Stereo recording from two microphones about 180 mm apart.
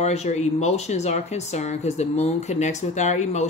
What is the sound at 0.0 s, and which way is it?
Speech, 35° left (ahead or behind).